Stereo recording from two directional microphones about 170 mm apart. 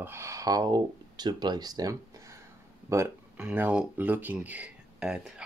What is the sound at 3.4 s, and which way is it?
Speech, 10° right (ahead or behind).